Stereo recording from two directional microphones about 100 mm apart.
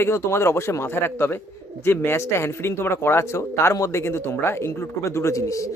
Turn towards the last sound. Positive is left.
turn(degrees=30)  # may be behind; listen again after turning